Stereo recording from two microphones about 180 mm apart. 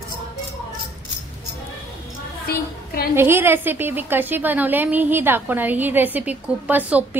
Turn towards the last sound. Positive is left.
turn(degrees=-10)  # may be behind; listen again after turning